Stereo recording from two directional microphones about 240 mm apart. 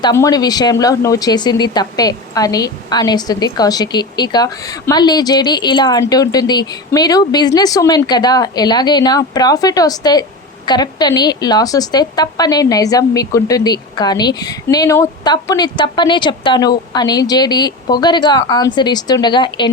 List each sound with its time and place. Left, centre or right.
0.0 s speech: centre